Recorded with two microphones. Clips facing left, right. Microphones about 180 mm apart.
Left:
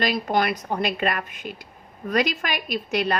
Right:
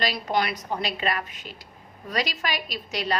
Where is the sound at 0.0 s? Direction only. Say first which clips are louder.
Left 3 dB; 50° left (ahead or behind).